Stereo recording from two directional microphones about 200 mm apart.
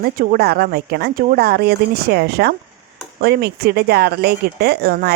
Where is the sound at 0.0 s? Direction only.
45° right (ahead or behind).